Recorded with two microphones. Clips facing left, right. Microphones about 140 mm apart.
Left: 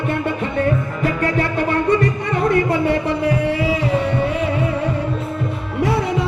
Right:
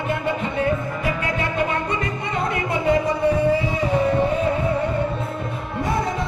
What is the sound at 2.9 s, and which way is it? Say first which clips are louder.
Music: even; 75° left (ahead or behind).